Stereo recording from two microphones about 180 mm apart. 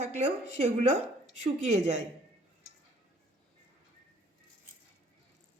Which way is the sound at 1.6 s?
40° right (ahead or behind).